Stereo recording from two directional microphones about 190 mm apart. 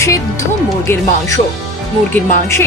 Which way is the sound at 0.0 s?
15° left (ahead or behind).